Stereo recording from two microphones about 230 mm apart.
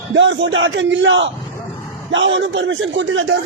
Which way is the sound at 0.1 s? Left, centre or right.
Right.